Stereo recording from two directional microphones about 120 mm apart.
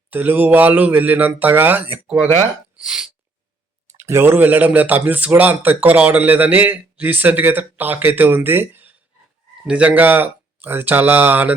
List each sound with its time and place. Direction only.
0.1 s speech: 15° right (ahead or behind)
3.9 s speech: 20° right (ahead or behind)